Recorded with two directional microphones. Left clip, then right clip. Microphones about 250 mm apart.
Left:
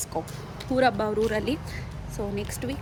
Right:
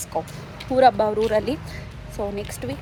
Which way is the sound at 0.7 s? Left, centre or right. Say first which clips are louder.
Right 7 dB; centre.